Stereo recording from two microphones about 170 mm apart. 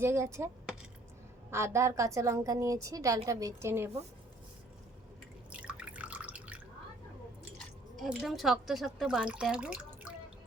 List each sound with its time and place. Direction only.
0.0 s a woman's voice: 15° right (ahead or behind)
5.5 s drip: 5° right (ahead or behind)
7.9 s a woman's voice: centre (ahead or behind)